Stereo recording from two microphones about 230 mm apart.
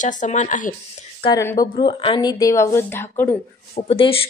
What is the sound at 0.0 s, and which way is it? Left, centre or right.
Speech, left.